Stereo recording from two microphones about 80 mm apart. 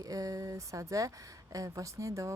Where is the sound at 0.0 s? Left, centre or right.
Right.